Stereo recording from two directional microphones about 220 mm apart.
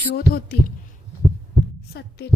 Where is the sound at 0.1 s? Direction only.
45° left (ahead or behind).